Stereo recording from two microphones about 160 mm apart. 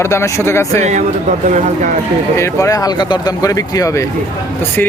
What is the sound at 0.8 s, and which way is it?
Speech, 45° right (ahead or behind).